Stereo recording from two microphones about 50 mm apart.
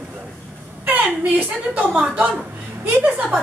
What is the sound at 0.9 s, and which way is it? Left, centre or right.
A woman's voice, right.